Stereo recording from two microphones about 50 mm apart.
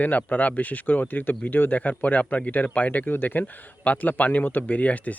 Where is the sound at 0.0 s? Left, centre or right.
Left.